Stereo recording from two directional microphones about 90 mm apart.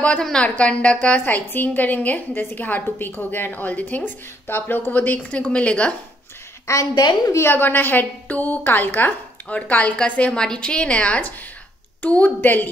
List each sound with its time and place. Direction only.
0.0 s a woman's voice: 10° left (ahead or behind)
7.0 s a woman's voice: 50° left (ahead or behind)
7.3 s a woman's voice: 25° left (ahead or behind)